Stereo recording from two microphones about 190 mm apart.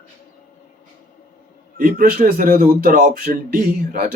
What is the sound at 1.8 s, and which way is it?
A man's voice, 45° right (ahead or behind).